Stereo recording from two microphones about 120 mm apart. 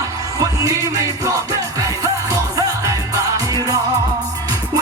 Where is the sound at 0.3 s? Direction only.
30° right (ahead or behind).